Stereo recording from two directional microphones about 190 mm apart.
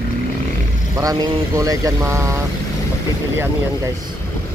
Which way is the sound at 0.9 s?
20° right (ahead or behind).